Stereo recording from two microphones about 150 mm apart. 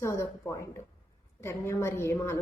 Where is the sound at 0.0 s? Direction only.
20° left (ahead or behind).